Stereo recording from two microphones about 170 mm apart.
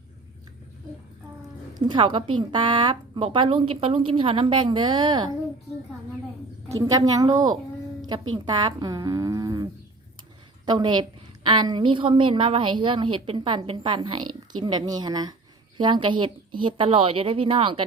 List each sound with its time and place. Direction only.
1.7 s a woman's voice: 30° right (ahead or behind)
6.7 s a woman's voice: 20° right (ahead or behind)
10.7 s a woman's voice: 25° right (ahead or behind)